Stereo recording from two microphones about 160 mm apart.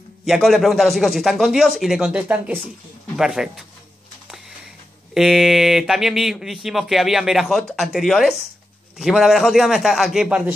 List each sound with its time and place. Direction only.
0.3 s speech: centre (ahead or behind)
5.1 s speech: centre (ahead or behind)